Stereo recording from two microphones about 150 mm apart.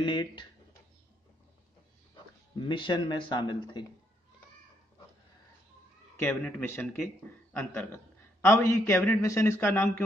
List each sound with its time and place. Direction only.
0.0 s speech: 30° left (ahead or behind)
2.5 s speech: 35° left (ahead or behind)
6.2 s a man's voice: 15° left (ahead or behind)